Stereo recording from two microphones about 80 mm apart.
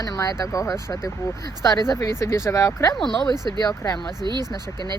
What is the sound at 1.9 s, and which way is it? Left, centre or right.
Speech, left.